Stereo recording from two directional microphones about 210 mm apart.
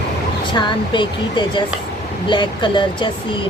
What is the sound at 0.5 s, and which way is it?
Speech, 20° left (ahead or behind).